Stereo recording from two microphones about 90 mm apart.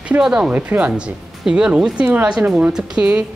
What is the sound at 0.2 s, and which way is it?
A woman's voice, 10° right (ahead or behind).